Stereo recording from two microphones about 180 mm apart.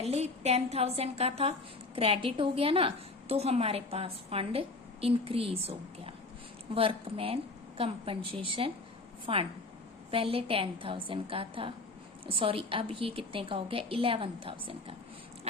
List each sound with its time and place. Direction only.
0.0 s a woman's voice: 35° right (ahead or behind)